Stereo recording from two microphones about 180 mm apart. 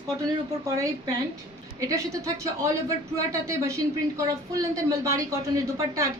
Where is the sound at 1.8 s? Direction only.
20° right (ahead or behind).